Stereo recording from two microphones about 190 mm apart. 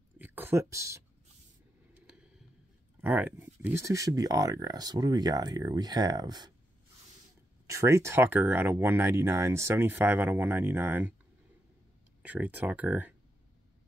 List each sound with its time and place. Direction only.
0.2 s a sound: 10° right (ahead or behind)
3.0 s speech: 10° right (ahead or behind)
7.6 s speech: 15° right (ahead or behind)
12.2 s speech: 10° right (ahead or behind)